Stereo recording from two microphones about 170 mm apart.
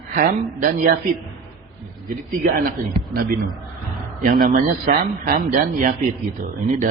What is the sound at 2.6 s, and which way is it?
Speech, 60° right (ahead or behind).